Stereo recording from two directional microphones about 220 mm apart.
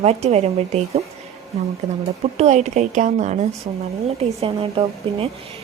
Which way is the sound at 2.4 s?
30° right (ahead or behind).